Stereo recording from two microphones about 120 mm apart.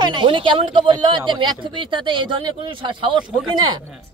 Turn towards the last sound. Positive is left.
turn(degrees=-40)  # may be behind; listen again after turning